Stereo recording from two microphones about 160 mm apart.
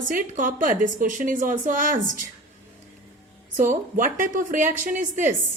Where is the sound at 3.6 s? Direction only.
55° right (ahead or behind).